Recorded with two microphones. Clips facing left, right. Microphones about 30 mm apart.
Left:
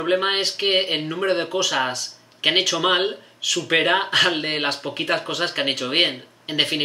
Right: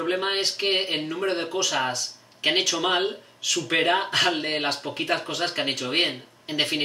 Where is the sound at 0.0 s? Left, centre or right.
Left.